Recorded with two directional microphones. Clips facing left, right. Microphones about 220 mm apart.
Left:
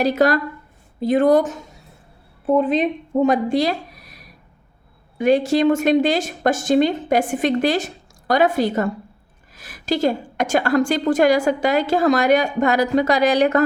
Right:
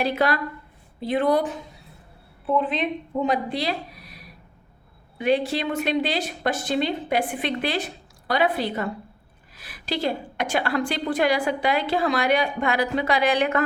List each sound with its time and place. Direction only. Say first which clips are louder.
0.0 s a woman's voice: left 6 dB; 40° left (ahead or behind)
9.6 s a sound: left 7 dB; 45° left (ahead or behind)
10.3 s a woman's voice: left 7 dB; 45° left (ahead or behind)